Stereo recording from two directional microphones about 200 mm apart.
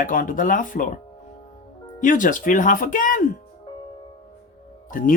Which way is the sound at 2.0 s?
40° left (ahead or behind).